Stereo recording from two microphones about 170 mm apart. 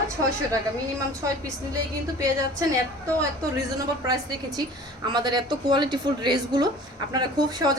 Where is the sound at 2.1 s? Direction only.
20° right (ahead or behind).